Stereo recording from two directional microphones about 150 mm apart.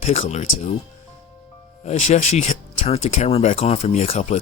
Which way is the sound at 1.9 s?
50° left (ahead or behind).